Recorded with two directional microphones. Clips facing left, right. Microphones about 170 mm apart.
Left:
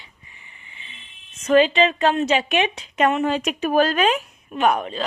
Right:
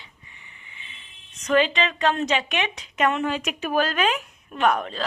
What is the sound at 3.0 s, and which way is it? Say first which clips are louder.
Speech: left 3 dB; 35° left (ahead or behind).